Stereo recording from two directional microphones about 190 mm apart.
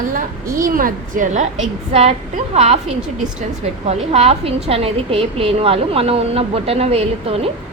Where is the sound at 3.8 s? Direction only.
35° right (ahead or behind).